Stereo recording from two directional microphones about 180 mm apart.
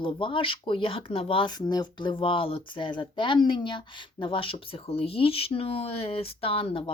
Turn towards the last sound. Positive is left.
turn(degrees=30)  # may be behind; listen again after turning